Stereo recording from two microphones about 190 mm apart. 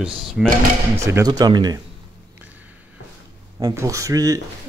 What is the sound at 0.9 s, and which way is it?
Speech, 15° right (ahead or behind).